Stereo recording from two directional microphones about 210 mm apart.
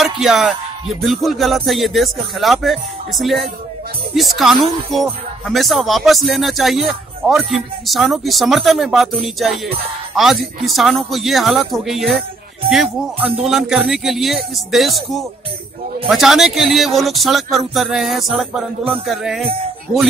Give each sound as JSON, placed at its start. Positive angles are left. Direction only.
{"t": 0.0, "sound": "speech", "side_deg": 0}